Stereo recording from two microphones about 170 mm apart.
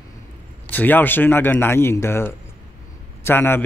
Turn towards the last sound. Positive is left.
turn(degrees=15)  # may be behind; listen again after turning